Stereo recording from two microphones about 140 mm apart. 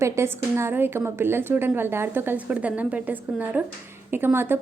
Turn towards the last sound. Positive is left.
turn(degrees=-15)  # may be behind; listen again after turning